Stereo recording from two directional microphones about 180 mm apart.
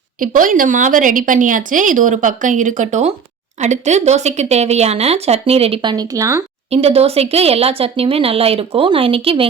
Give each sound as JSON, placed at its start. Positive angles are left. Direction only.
{"t": 0.2, "sound": "speech", "side_deg": -50}
{"t": 6.7, "sound": "speech", "side_deg": -35}